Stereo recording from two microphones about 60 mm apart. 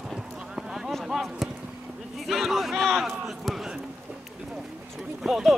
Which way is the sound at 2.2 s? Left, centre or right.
Centre.